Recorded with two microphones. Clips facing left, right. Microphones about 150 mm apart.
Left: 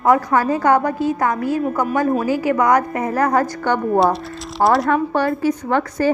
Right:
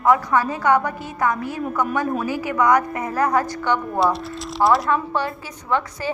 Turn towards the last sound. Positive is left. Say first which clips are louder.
# left 5 dB
turn(degrees=50)  # may be behind; listen again after turning